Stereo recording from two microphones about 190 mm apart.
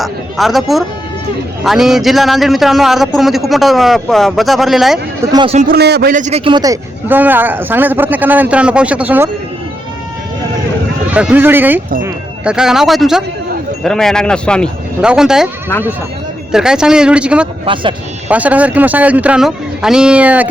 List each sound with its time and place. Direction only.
0.0 s a man's voice: centre (ahead or behind)
5.3 s a man's voice: 25° right (ahead or behind)
5.5 s a man's voice: 50° right (ahead or behind); by 9.3 s 10° right (ahead or behind)
11.1 s a man's voice: 5° right (ahead or behind)
16.5 s a man's voice: 5° right (ahead or behind)